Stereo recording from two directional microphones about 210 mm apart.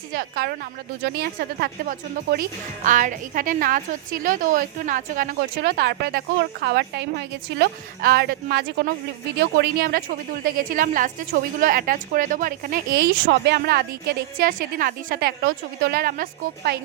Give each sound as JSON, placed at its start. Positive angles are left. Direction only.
{"t": 0.1, "sound": "a woman's voice", "side_deg": -45}